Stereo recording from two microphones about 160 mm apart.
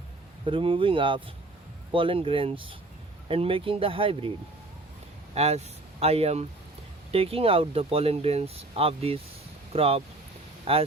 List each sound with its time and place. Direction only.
0.4 s speech: 35° right (ahead or behind)
5.3 s speech: 40° right (ahead or behind)